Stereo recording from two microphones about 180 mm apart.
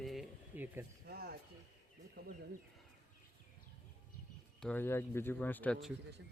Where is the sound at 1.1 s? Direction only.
60° right (ahead or behind).